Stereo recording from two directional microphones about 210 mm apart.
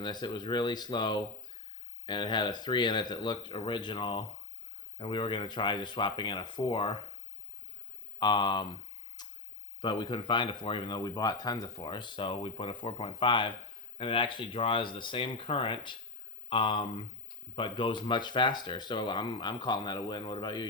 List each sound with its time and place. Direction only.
0.0 s speech: 20° left (ahead or behind)
8.2 s speech: 20° left (ahead or behind)
9.2 s clicking: 20° left (ahead or behind)
9.8 s speech: 20° left (ahead or behind)